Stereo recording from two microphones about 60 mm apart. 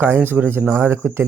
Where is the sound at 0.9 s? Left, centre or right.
Right.